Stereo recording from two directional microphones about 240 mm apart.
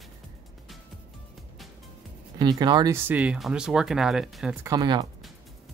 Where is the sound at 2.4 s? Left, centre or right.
Centre.